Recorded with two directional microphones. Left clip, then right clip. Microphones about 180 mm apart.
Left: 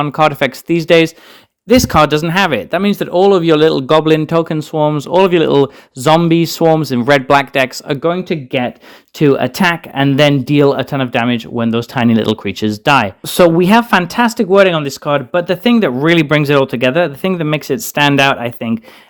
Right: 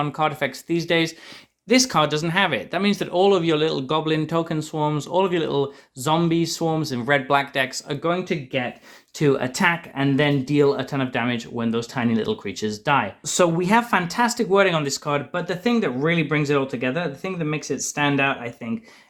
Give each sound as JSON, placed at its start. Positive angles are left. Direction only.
{"t": 0.0, "sound": "speech", "side_deg": 45}
{"t": 9.1, "sound": "speech", "side_deg": 45}